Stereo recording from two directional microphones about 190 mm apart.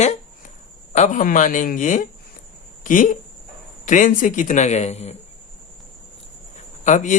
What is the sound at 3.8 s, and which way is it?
Speech, 40° left (ahead or behind).